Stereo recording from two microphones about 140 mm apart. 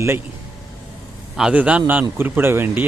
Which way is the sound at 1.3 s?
10° right (ahead or behind).